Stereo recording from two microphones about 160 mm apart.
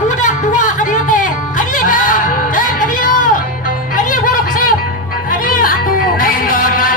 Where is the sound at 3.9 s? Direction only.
55° left (ahead or behind).